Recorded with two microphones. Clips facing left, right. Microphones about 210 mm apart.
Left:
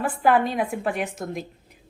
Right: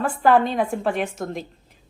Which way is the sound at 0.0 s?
10° left (ahead or behind).